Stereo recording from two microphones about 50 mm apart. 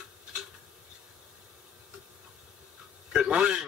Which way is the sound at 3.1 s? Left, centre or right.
Right.